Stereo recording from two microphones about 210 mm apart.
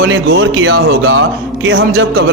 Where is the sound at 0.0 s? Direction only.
60° right (ahead or behind).